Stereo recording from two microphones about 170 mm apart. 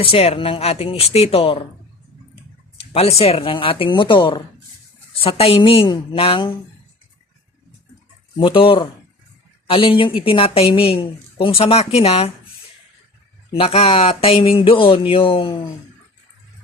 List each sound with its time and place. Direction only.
0.0 s a woman's voice: 35° left (ahead or behind)
2.9 s a woman's voice: 35° left (ahead or behind)
8.4 s a woman's voice: 30° left (ahead or behind)
13.5 s a woman's voice: 35° left (ahead or behind)